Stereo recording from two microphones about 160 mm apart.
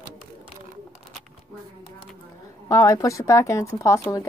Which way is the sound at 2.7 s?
20° left (ahead or behind).